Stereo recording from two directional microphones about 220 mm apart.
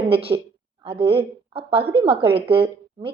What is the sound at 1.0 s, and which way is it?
A woman's voice, 25° right (ahead or behind).